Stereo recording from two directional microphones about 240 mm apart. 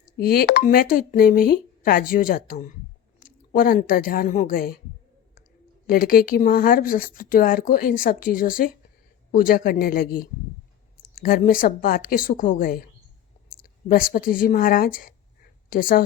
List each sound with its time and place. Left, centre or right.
0.2 s speech: left
5.9 s speech: left